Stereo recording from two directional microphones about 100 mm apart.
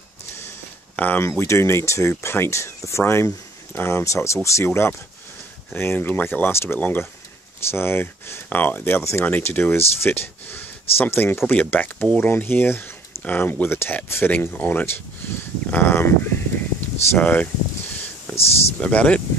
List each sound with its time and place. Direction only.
0.9 s speech: 20° left (ahead or behind)
18.3 s speech: 90° left
18.8 s speech: 15° left (ahead or behind)